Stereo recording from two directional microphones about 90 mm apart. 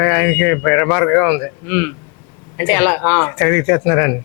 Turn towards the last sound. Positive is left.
turn(degrees=20)  # may be behind; listen again after turning